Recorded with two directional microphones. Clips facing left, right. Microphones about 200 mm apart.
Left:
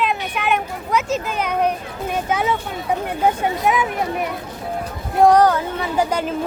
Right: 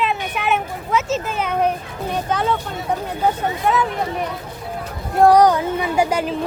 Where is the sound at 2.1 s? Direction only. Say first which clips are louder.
Even; 10° left (ahead or behind).